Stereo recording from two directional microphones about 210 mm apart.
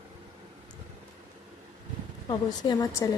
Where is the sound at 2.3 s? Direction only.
20° left (ahead or behind).